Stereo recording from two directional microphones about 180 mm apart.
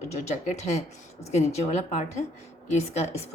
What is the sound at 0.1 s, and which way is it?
A woman's voice, 40° left (ahead or behind).